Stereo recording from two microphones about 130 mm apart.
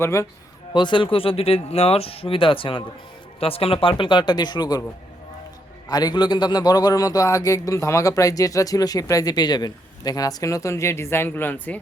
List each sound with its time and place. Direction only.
0.0 s a man's voice: 20° left (ahead or behind)
0.7 s speech: 35° left (ahead or behind)
5.9 s a man's voice: 30° left (ahead or behind); by 11.8 s 15° left (ahead or behind)